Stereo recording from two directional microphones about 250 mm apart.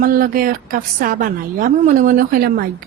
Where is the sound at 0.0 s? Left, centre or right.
Right.